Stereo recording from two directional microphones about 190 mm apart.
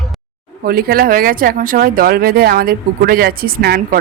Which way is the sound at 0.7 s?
50° right (ahead or behind).